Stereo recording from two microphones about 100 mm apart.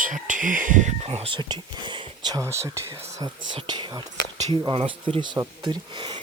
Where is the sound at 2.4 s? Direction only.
25° right (ahead or behind).